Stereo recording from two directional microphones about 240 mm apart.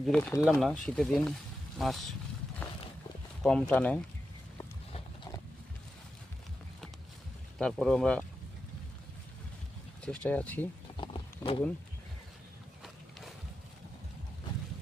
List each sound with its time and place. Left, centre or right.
0.0 s speech: centre
3.4 s speech: centre
4.5 s a sound: centre
7.6 s speech: centre
10.0 s speech: centre
10.9 s a sound: left
12.8 s music: centre